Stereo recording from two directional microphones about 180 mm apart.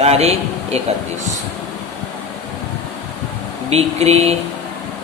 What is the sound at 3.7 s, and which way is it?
Speech, 35° right (ahead or behind).